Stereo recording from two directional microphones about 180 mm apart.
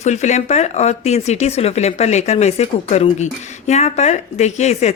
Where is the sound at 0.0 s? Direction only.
40° left (ahead or behind).